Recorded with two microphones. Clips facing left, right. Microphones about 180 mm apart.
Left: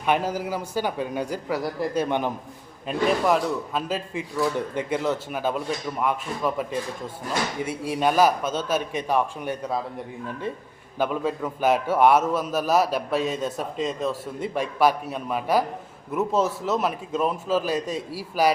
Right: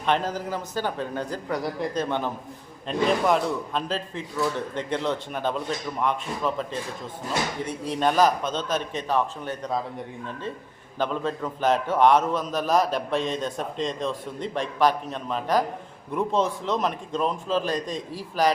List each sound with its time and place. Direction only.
0.0 s a man's voice: 10° left (ahead or behind)
10.9 s a man's voice: 10° left (ahead or behind)